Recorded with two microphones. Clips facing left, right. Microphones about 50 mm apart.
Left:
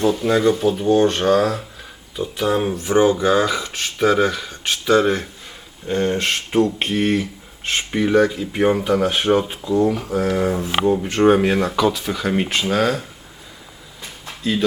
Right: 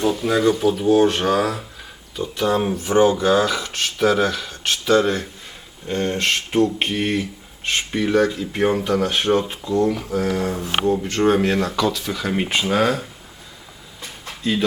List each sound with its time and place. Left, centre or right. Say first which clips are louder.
0.0 s speech: left 2 dB; centre
2.1 s speech: even; centre
2.9 s speech: even; left
6.5 s speech: left 2 dB; centre